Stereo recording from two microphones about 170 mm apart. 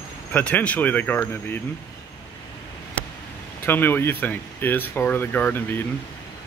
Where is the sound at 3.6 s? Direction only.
10° left (ahead or behind).